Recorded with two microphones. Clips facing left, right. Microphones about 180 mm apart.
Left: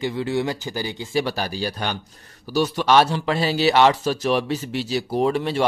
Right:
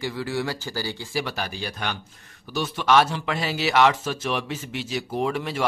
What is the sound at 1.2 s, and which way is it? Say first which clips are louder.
Speech: left 5 dB; 35° left (ahead or behind).